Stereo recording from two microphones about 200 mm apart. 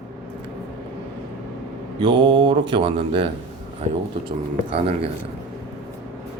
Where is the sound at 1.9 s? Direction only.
25° right (ahead or behind).